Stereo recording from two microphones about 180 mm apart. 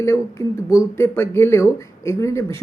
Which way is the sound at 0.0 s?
15° left (ahead or behind).